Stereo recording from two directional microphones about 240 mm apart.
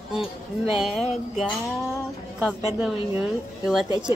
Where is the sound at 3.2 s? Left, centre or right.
Centre.